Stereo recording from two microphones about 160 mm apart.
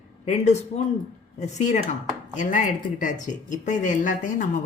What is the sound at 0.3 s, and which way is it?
Speech, 45° left (ahead or behind).